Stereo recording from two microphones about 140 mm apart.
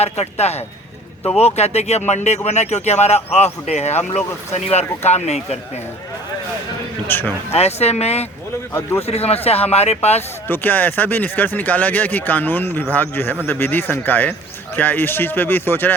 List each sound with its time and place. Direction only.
0.0 s speech: 50° left (ahead or behind)
7.1 s speech: 15° left (ahead or behind)
7.5 s speech: 50° left (ahead or behind)
8.7 s speech: 20° left (ahead or behind)
9.0 s speech: 45° left (ahead or behind)
10.5 s speech: 15° left (ahead or behind)